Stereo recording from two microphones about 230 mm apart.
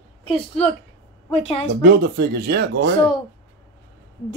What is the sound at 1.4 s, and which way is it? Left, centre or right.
Speech, left.